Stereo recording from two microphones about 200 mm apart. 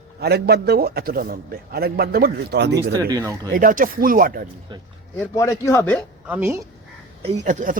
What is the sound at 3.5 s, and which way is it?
Speech, 45° right (ahead or behind).